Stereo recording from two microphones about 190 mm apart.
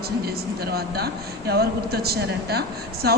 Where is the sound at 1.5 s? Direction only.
55° right (ahead or behind).